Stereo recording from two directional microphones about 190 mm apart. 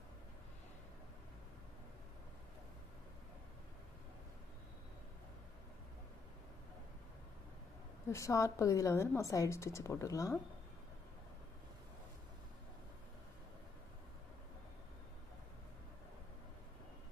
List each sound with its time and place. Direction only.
8.1 s a woman's voice: 15° left (ahead or behind)